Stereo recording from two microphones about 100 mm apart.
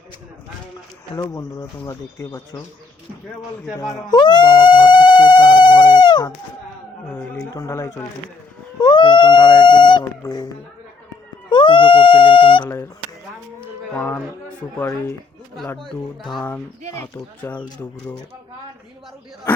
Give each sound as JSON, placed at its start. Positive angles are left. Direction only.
{"t": 1.1, "sound": "speech", "side_deg": 35}
{"t": 3.9, "sound": "speech", "side_deg": 45}
{"t": 7.3, "sound": "speech", "side_deg": 35}
{"t": 8.8, "sound": "a sound", "side_deg": 50}
{"t": 10.2, "sound": "speech", "side_deg": 35}
{"t": 11.4, "sound": "baby cry", "side_deg": 55}
{"t": 12.6, "sound": "speech", "side_deg": 25}
{"t": 13.9, "sound": "speech", "side_deg": 20}
{"t": 17.0, "sound": "speech", "side_deg": 25}